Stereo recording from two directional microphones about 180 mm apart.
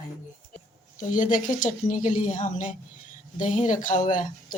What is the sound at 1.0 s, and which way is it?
Speech, 45° left (ahead or behind).